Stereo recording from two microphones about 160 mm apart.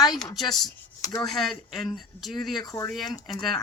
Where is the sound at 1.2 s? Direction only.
Centre (ahead or behind).